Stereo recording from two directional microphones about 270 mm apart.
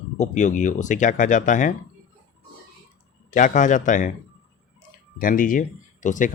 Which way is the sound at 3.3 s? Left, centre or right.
Left.